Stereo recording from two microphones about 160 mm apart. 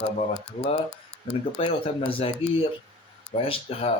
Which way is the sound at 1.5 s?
35° left (ahead or behind).